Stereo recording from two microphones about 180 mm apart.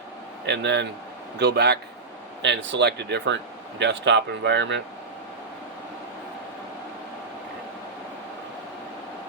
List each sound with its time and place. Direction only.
0.4 s speech: 75° right (ahead or behind)
2.4 s speech: 85° right